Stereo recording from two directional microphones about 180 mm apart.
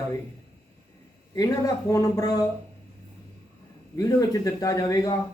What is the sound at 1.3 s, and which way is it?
A man's voice, 20° left (ahead or behind).